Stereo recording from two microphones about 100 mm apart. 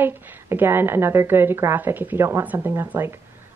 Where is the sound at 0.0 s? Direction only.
20° right (ahead or behind).